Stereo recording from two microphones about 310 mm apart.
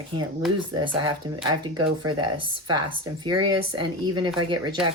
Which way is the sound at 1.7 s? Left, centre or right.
Centre.